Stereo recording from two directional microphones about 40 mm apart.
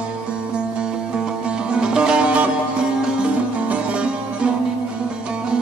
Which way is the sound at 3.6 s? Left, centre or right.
Right.